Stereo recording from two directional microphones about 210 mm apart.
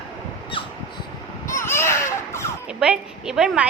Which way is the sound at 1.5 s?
10° left (ahead or behind).